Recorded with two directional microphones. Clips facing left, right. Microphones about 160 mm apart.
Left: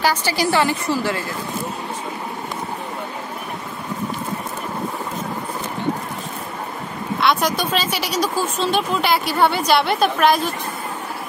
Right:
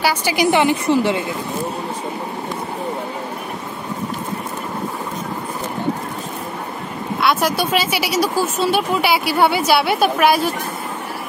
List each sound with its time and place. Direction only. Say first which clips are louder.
0.0 s a woman's voice: right 2 dB; 10° right (ahead or behind)
7.2 s speech: right 1 dB; 5° right (ahead or behind)